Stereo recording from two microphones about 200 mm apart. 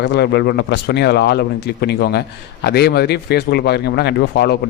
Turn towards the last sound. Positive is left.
turn(degrees=55)  # may be behind; listen again after turning